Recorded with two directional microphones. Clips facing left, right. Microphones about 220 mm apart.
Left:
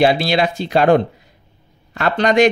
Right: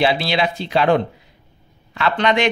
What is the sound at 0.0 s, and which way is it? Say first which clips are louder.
Speech: left 4 dB; 45° left (ahead or behind).